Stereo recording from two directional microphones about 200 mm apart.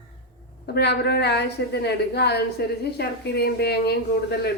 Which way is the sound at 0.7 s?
55° left (ahead or behind).